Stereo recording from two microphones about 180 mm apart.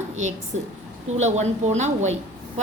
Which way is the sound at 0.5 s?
90° right.